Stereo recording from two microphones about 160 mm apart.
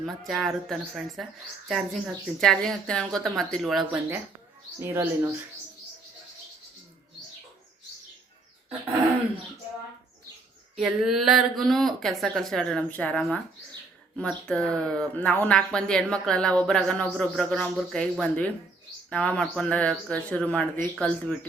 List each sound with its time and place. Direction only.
0.0 s speech: centre (ahead or behind)
4.8 s speech: 15° right (ahead or behind)
10.8 s speech: centre (ahead or behind)